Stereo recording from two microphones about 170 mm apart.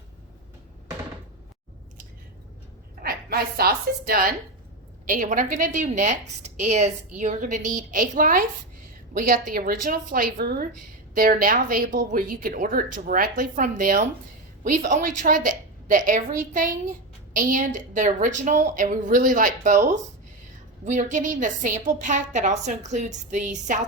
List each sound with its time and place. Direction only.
3.0 s a woman's voice: 65° right (ahead or behind); by 23.8 s 45° right (ahead or behind)